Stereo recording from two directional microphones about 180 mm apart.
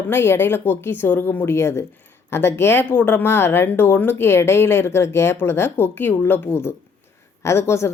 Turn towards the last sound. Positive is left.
turn(degrees=15)  # may be behind; listen again after turning